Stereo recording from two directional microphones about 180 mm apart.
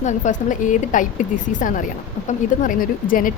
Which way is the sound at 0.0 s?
45° left (ahead or behind).